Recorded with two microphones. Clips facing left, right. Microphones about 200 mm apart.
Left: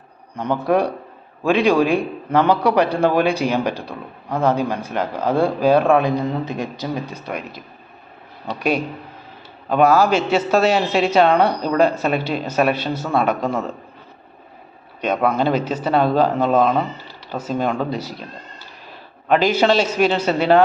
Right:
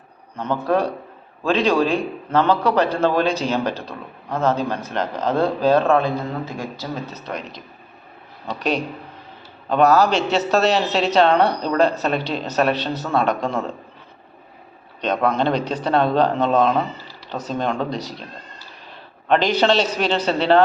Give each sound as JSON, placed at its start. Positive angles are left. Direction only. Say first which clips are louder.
{"t": 0.3, "sound": "a man's voice", "louder": "left 2 dB", "side_deg": 15}
{"t": 15.0, "sound": "a man's voice", "louder": "left 1 dB", "side_deg": 10}
{"t": 19.3, "sound": "a man's voice", "louder": "left 1 dB", "side_deg": 5}